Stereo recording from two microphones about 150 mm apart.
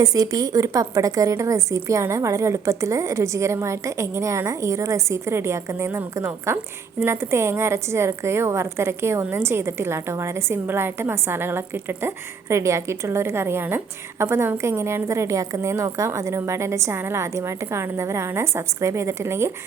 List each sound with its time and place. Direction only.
0.0 s a woman's voice: 25° right (ahead or behind)